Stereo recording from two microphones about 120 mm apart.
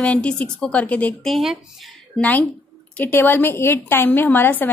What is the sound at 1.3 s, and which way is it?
Speech, centre (ahead or behind).